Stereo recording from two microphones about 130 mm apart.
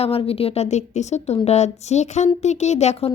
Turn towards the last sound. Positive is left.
turn(degrees=60)  # may be behind; listen again after turning